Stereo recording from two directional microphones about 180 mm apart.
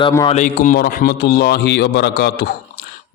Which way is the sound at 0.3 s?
40° left (ahead or behind).